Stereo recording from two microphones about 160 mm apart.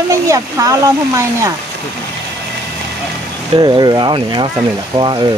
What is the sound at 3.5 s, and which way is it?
Speech, 25° right (ahead or behind).